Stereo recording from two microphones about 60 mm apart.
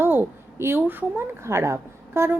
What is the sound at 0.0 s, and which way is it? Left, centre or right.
A woman's voice, right.